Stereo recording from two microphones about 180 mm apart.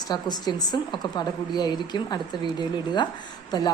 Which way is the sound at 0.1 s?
20° left (ahead or behind).